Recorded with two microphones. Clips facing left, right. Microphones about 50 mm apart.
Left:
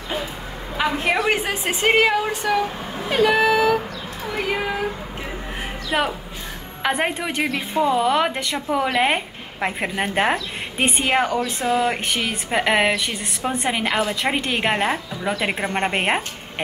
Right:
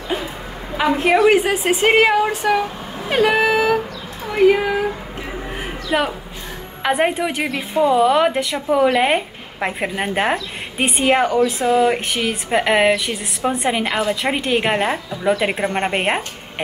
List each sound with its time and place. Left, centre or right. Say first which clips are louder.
0.7 s a woman's voice: right 5 dB; centre
3.1 s vehicle: right 1 dB; right
4.4 s a sound: right 10 dB; centre
5.9 s a woman's voice: right 2 dB; centre